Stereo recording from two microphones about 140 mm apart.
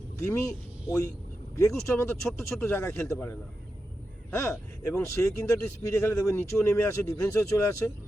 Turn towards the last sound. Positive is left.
turn(degrees=20)  # may be behind; listen again after turning